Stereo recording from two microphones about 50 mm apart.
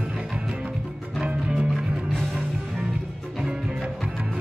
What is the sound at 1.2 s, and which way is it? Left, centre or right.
Music, right.